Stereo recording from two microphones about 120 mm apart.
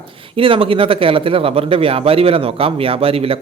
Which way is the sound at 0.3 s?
50° right (ahead or behind).